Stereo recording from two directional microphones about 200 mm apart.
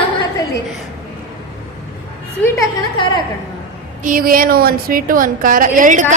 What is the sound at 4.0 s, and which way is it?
A woman's voice, 45° right (ahead or behind).